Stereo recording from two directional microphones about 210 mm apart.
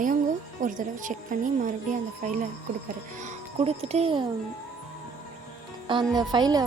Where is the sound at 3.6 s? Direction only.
30° right (ahead or behind).